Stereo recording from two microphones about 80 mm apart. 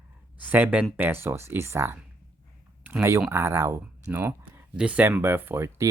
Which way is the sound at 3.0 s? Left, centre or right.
Right.